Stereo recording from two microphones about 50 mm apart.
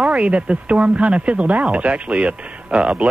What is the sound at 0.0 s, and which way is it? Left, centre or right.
Speech, right.